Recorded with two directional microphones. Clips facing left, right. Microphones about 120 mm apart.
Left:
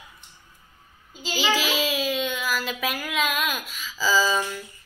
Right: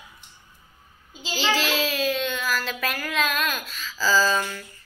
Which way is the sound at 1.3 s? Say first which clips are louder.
Even; 10° left (ahead or behind).